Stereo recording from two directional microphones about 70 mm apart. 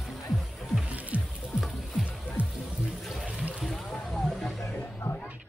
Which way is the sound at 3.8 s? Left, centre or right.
Centre.